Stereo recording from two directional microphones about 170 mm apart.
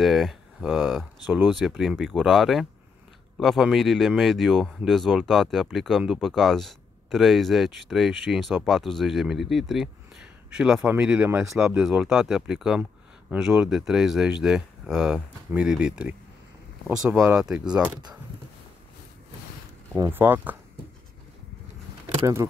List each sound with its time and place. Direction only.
0.0 s speech: centre (ahead or behind)
11.6 s speech: 5° right (ahead or behind)
20.0 s speech: 10° right (ahead or behind)
22.2 s speech: 15° right (ahead or behind)